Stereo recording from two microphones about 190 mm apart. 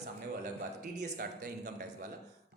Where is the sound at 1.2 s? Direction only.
60° right (ahead or behind).